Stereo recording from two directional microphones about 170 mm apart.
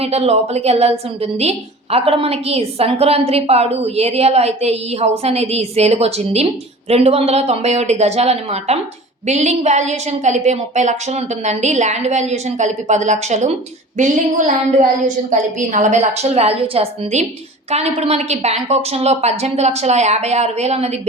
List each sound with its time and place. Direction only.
0.0 s a woman's voice: 35° right (ahead or behind)